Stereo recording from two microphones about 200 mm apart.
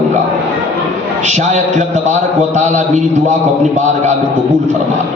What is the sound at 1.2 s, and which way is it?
A man's voice, 35° right (ahead or behind).